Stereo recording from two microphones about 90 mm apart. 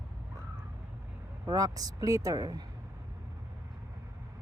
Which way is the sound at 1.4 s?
40° right (ahead or behind).